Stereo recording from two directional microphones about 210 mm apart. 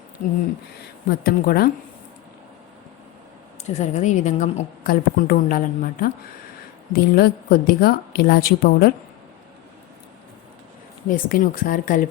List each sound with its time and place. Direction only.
1.2 s a woman's voice: 45° left (ahead or behind)
3.7 s a woman's voice: 30° left (ahead or behind)
11.1 s a woman's voice: 40° left (ahead or behind)